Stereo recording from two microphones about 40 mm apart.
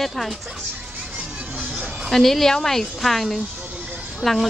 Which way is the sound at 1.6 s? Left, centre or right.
Right.